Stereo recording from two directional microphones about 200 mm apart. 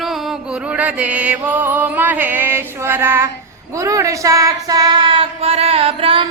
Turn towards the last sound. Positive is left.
turn(degrees=-30)  # may be behind; listen again after turning